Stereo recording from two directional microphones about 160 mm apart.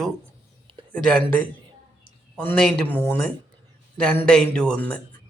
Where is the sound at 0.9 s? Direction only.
5° left (ahead or behind).